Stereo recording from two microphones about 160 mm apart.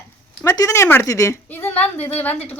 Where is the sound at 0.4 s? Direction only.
20° left (ahead or behind).